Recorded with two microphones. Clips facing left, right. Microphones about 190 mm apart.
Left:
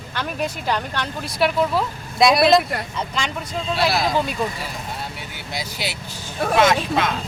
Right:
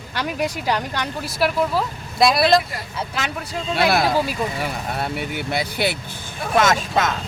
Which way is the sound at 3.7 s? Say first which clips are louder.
Right 2 dB; 55° right (ahead or behind).